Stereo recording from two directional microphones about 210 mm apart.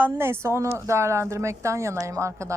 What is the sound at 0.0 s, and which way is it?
A woman's voice, 10° right (ahead or behind).